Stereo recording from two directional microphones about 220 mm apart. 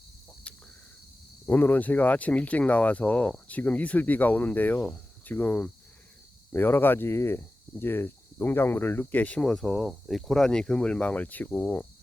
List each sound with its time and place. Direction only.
0.5 s cricket: 5° left (ahead or behind)
1.5 s speech: 10° left (ahead or behind)